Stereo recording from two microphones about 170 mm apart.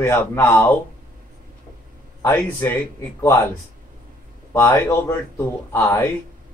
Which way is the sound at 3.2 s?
15° left (ahead or behind).